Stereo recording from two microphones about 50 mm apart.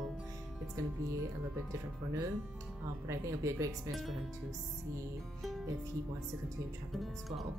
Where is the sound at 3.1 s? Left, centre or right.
Right.